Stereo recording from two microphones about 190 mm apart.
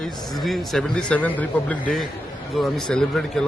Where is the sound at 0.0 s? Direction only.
Centre (ahead or behind).